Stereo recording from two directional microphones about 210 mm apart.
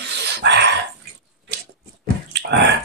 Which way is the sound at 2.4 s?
55° right (ahead or behind).